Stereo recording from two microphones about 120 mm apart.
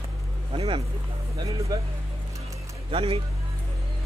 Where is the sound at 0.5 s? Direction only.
50° right (ahead or behind).